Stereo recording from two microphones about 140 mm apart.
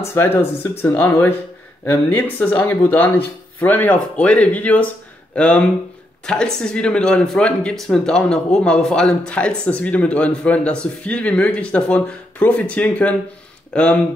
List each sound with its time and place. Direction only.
0.0 s speech: 15° left (ahead or behind)